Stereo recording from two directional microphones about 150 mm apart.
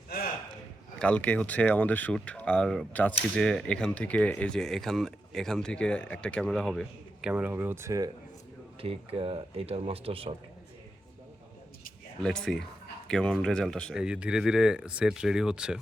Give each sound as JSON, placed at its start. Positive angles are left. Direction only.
{"t": 0.1, "sound": "a sound", "side_deg": 90}
{"t": 0.9, "sound": "speech", "side_deg": 10}
{"t": 8.8, "sound": "speech", "side_deg": -40}
{"t": 12.2, "sound": "speech", "side_deg": 5}
{"t": 13.9, "sound": "speech", "side_deg": -5}